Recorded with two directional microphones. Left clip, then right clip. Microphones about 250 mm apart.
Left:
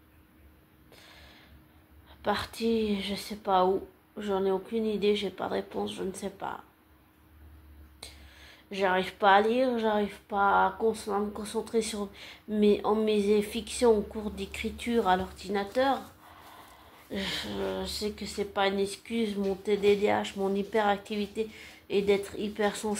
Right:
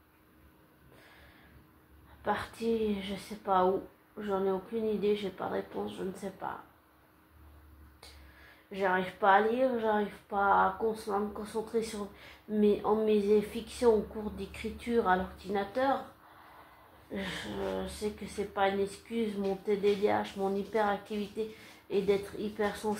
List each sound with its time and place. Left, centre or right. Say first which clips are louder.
2.2 s speech: left 3 dB; left
8.6 s speech: left 3 dB; left
17.1 s speech: left 4 dB; left